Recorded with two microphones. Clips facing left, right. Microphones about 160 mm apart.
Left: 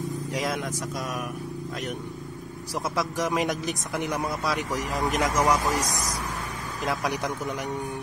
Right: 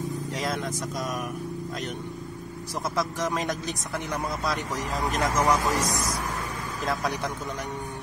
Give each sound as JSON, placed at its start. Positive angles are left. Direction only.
{"t": 3.2, "sound": "speech", "side_deg": 15}
{"t": 6.9, "sound": "speech", "side_deg": 15}